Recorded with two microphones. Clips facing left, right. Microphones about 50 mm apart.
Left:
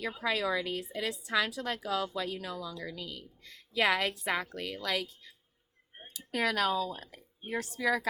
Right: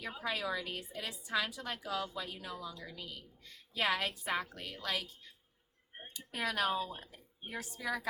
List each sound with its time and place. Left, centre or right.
0.2 s a woman's voice: left
6.3 s speech: left
7.0 s a sound: left
7.5 s speech: left